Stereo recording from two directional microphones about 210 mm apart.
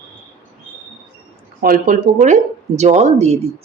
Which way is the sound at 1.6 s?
40° right (ahead or behind).